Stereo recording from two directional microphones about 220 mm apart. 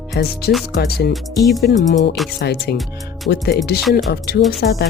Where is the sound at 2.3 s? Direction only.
45° left (ahead or behind).